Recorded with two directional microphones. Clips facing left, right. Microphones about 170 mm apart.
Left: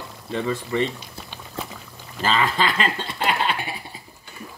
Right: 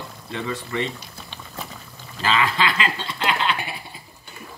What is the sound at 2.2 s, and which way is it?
Speech, 40° left (ahead or behind).